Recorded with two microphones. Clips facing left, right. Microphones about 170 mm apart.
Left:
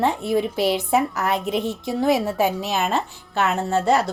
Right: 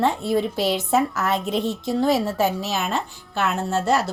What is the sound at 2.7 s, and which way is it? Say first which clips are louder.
Speech: left 2 dB; 60° left (ahead or behind).